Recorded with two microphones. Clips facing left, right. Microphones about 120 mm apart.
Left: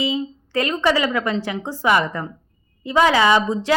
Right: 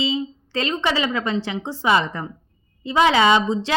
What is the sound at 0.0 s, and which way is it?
A woman's voice, 25° right (ahead or behind).